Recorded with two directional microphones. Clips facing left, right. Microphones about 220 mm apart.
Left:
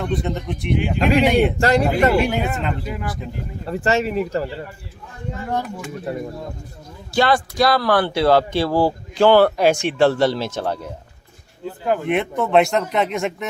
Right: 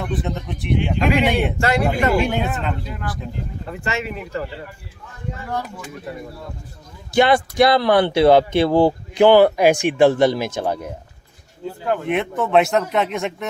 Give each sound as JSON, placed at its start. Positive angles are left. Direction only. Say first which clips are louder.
{"t": 0.0, "sound": "a man's voice", "louder": "left 2 dB", "side_deg": 0}
{"t": 1.6, "sound": "speech", "louder": "left 3 dB", "side_deg": 35}
{"t": 2.2, "sound": "a man's voice", "louder": "even", "side_deg": 0}
{"t": 3.7, "sound": "speech", "louder": "left 7 dB", "side_deg": 35}
{"t": 7.1, "sound": "speech", "louder": "right 3 dB", "side_deg": -20}
{"t": 11.9, "sound": "a man's voice", "louder": "left 1 dB", "side_deg": 0}